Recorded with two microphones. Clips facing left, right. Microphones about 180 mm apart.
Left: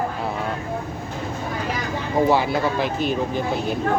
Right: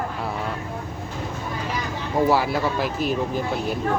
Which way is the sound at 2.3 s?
Centre (ahead or behind).